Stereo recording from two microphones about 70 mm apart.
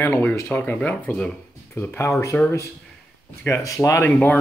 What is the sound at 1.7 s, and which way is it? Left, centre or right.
Speech, left.